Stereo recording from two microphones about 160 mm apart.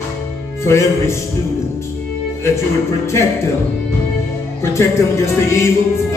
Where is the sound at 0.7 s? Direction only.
15° left (ahead or behind).